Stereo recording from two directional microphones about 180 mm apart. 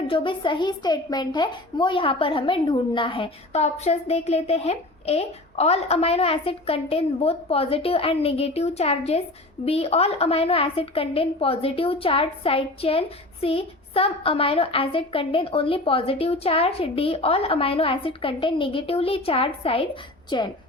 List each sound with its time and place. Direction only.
0.1 s a woman's voice: 30° left (ahead or behind)